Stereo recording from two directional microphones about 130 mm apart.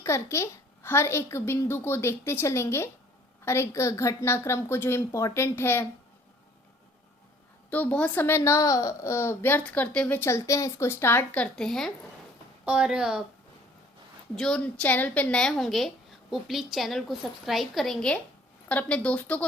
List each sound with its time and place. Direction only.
0.0 s a child's voice: 20° left (ahead or behind)
7.7 s a child's voice: 10° left (ahead or behind)
11.5 s a woman's voice: 5° left (ahead or behind)
12.6 s a woman's voice: 10° right (ahead or behind)
14.3 s a child's voice: 5° left (ahead or behind)